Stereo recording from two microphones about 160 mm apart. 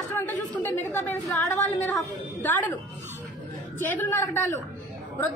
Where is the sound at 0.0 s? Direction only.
10° left (ahead or behind).